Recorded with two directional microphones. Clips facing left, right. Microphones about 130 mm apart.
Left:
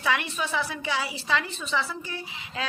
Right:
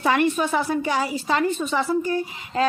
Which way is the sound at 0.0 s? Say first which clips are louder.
Right 8 dB; 45° right (ahead or behind).